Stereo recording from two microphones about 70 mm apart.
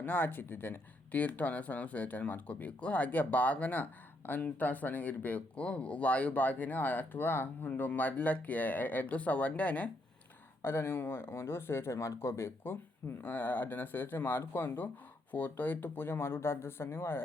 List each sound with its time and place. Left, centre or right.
0.0 s speech: left
10.6 s speech: left